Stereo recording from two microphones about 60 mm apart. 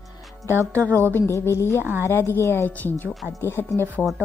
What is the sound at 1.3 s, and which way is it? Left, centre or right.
Speech, left.